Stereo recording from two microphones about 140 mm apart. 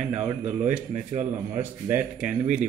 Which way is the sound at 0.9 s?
55° right (ahead or behind).